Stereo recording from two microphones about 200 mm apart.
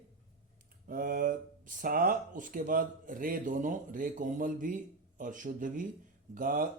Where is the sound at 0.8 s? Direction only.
40° right (ahead or behind).